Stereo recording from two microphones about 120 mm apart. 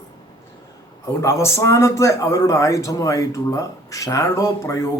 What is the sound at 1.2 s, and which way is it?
A man's voice, 25° left (ahead or behind).